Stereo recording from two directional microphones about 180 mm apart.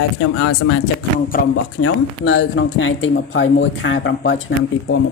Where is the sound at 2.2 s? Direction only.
90° left.